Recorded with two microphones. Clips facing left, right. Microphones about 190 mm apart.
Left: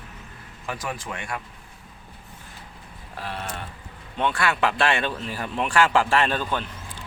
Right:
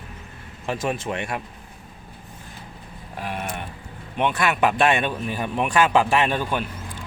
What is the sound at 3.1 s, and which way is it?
Speech, 15° right (ahead or behind).